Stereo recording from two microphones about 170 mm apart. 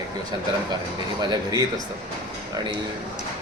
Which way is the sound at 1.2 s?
25° right (ahead or behind).